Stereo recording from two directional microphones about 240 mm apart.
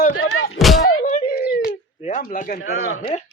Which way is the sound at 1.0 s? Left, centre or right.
Left.